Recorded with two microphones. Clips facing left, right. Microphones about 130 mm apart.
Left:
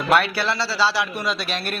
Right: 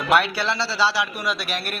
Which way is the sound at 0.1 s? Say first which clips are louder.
Even; 15° right (ahead or behind).